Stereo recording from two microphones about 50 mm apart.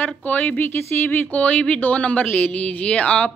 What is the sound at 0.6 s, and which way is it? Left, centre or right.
Speech, left.